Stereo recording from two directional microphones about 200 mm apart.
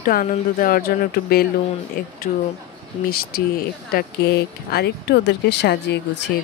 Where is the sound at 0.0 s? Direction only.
45° left (ahead or behind).